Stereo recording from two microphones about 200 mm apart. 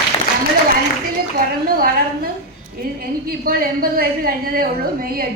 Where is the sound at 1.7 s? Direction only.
45° right (ahead or behind).